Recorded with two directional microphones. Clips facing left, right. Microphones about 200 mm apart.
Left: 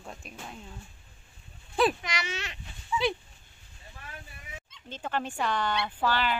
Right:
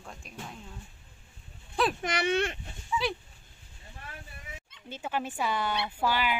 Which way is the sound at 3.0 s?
Centre (ahead or behind).